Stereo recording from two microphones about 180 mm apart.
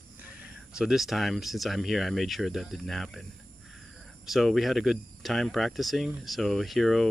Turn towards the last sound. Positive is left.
turn(degrees=0)  # may be behind; listen again after turning